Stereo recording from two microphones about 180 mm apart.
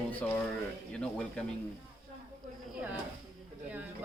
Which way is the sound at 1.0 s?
5° left (ahead or behind).